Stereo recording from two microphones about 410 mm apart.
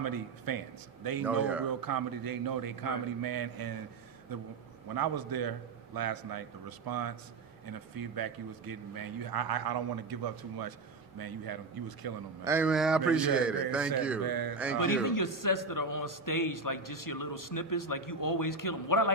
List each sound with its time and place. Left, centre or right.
0.0 s a man's voice: right
1.2 s speech: centre
1.8 s a man's voice: right
4.9 s a man's voice: right
12.5 s speech: centre
14.3 s a man's voice: right
14.8 s a man's voice: left